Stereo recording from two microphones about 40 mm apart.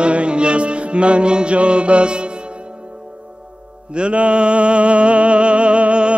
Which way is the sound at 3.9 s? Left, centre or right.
Right.